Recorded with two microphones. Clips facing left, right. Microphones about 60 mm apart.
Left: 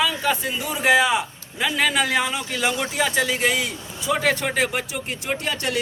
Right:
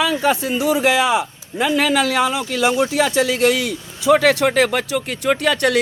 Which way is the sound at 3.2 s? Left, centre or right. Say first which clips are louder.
Right 5 dB; right.